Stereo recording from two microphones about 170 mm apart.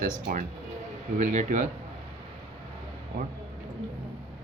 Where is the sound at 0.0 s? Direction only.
55° right (ahead or behind).